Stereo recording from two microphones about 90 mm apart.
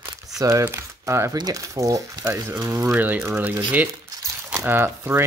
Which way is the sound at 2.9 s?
20° right (ahead or behind).